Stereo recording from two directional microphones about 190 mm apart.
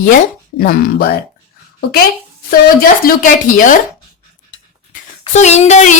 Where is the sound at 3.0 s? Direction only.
45° left (ahead or behind).